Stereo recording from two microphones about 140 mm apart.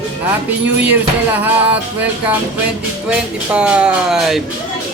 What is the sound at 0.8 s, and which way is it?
Speech, 10° right (ahead or behind).